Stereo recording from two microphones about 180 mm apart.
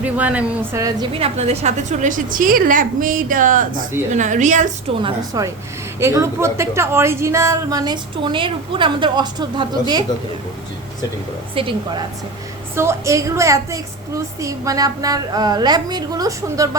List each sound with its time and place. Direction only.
0.0 s a woman's voice: 10° right (ahead or behind)
1.1 s a woman's voice: 35° right (ahead or behind)
5.0 s a woman's voice: 20° right (ahead or behind)
11.5 s a woman's voice: 30° right (ahead or behind)
12.7 s a woman's voice: 15° right (ahead or behind)